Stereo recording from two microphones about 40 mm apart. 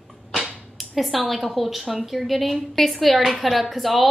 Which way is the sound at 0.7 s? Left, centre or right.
Centre.